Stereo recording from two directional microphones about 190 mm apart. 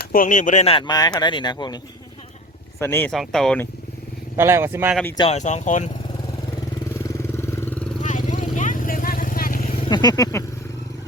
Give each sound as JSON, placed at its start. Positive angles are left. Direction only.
{"t": 0.0, "sound": "speech", "side_deg": 45}
{"t": 2.8, "sound": "speech", "side_deg": 10}
{"t": 4.4, "sound": "speech", "side_deg": -10}
{"t": 5.1, "sound": "speech", "side_deg": 25}
{"t": 5.4, "sound": "speech", "side_deg": 40}
{"t": 7.0, "sound": "vehicle", "side_deg": 15}
{"t": 8.0, "sound": "vehicle", "side_deg": 40}
{"t": 9.9, "sound": "speech", "side_deg": 20}